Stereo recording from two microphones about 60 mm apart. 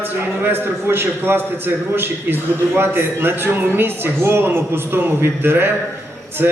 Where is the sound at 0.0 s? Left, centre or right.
Right.